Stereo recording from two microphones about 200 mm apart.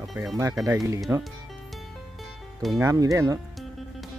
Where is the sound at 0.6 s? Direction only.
Centre (ahead or behind).